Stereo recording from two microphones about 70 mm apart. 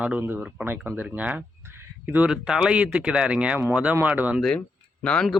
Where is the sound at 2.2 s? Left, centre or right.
Centre.